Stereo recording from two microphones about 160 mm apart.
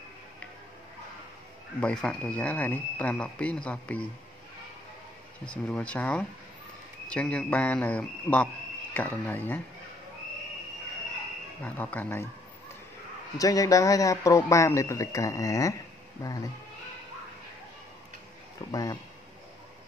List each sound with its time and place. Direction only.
1.8 s speech: 5° left (ahead or behind)
5.5 s speech: 5° left (ahead or behind)
11.6 s speech: 10° left (ahead or behind)
13.4 s a man's voice: 20° left (ahead or behind)
18.7 s a man's voice: 25° left (ahead or behind)